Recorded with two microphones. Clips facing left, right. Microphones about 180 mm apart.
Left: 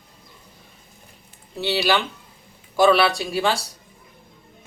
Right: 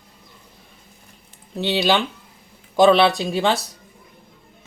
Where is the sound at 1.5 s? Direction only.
20° right (ahead or behind).